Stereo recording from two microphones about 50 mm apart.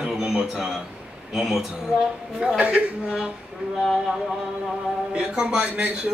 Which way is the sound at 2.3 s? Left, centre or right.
Right.